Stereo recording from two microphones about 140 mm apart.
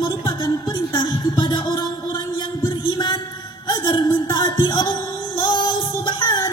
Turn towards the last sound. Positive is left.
turn(degrees=30)  # may be behind; listen again after turning